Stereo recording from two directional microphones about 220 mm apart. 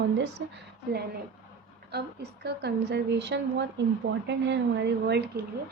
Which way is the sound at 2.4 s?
50° right (ahead or behind).